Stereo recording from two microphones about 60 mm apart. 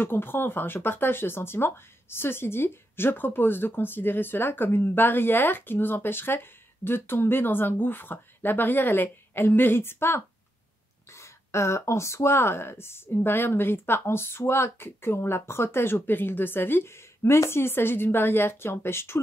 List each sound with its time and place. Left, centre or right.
0.0 s speech: left